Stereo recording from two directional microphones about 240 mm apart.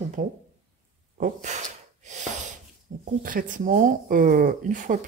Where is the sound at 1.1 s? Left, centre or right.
Right.